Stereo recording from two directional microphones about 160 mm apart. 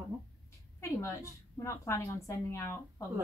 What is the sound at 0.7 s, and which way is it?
A woman's voice, 20° left (ahead or behind).